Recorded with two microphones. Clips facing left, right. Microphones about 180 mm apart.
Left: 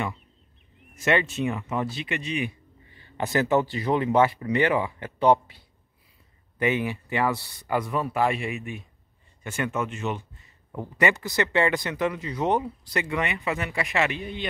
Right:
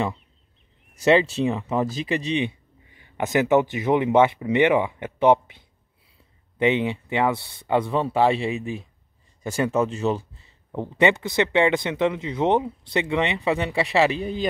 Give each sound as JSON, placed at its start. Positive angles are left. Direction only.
{"t": 1.0, "sound": "speech", "side_deg": -35}
{"t": 2.9, "sound": "speech", "side_deg": -15}
{"t": 6.6, "sound": "speech", "side_deg": -25}